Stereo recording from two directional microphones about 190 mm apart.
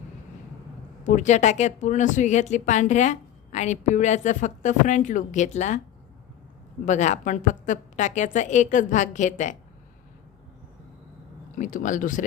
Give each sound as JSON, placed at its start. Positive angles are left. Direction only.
{"t": 1.0, "sound": "speech", "side_deg": 40}
{"t": 6.8, "sound": "speech", "side_deg": 40}
{"t": 11.5, "sound": "speech", "side_deg": 45}